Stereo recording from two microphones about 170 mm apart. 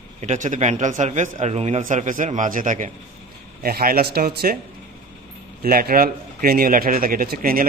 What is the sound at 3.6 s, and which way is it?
Speech, 60° right (ahead or behind).